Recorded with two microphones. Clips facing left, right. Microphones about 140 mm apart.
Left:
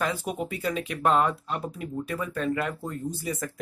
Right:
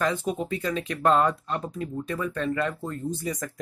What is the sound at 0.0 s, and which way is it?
Speech, 10° left (ahead or behind).